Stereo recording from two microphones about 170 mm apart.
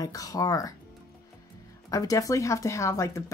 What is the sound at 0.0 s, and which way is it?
Speech, 20° left (ahead or behind).